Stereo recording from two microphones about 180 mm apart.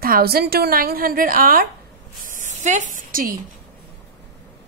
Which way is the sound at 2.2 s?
45° right (ahead or behind).